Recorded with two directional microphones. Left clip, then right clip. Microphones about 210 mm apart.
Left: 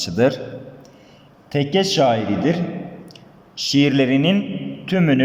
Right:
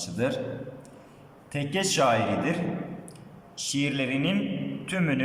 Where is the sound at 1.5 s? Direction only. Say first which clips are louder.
Left 8 dB; 25° left (ahead or behind).